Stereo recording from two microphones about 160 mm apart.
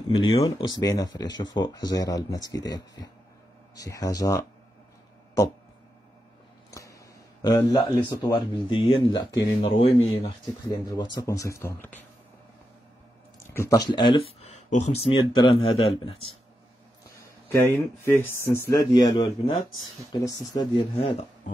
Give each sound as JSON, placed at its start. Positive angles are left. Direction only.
{"t": 0.4, "sound": "speech", "side_deg": 25}
{"t": 6.7, "sound": "a sound", "side_deg": 20}
{"t": 7.4, "sound": "speech", "side_deg": 25}
{"t": 9.7, "sound": "speech", "side_deg": 35}
{"t": 13.4, "sound": "speech", "side_deg": 15}
{"t": 17.5, "sound": "speech", "side_deg": 15}
{"t": 21.0, "sound": "speech", "side_deg": 40}